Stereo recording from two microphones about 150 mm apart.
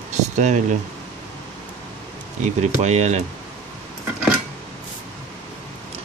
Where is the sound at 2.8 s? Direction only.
50° right (ahead or behind).